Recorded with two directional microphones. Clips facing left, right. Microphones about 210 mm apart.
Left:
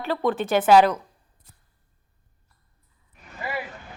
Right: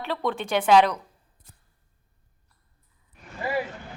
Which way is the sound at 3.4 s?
35° right (ahead or behind).